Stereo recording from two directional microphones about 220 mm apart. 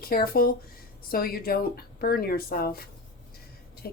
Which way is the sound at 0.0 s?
45° left (ahead or behind).